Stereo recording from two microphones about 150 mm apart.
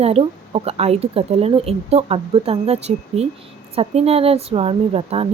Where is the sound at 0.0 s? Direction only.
40° right (ahead or behind).